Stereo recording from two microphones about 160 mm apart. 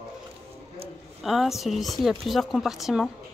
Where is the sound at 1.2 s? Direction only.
Centre (ahead or behind).